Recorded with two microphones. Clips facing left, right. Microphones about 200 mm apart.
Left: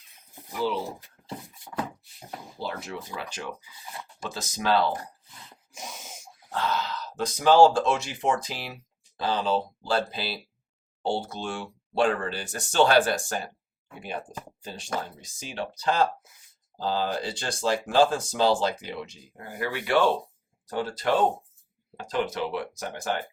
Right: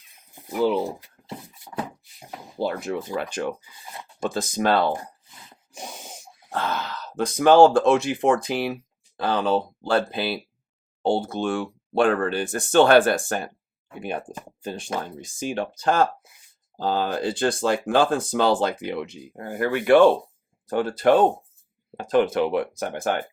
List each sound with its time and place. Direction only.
2.6 s speech: 50° right (ahead or behind)
5.7 s a sound: 30° right (ahead or behind)
6.5 s speech: 55° right (ahead or behind)